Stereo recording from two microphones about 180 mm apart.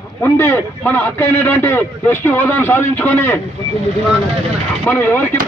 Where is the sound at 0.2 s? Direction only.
10° left (ahead or behind).